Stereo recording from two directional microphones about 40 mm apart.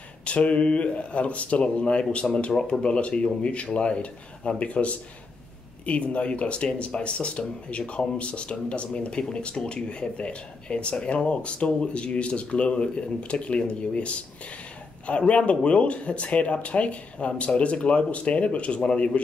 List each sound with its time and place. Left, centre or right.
0.2 s speech: left